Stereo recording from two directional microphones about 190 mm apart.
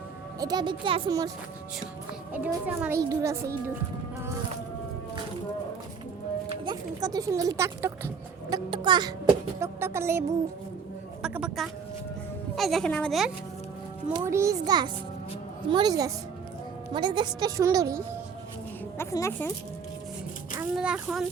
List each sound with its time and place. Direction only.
0.3 s speech: 20° right (ahead or behind)
2.3 s a woman's voice: 10° right (ahead or behind)
6.5 s speech: 20° right (ahead or behind); by 13.3 s centre (ahead or behind)
14.1 s speech: 15° right (ahead or behind)
18.9 s a woman's voice: 15° left (ahead or behind)
20.6 s speech: 5° right (ahead or behind)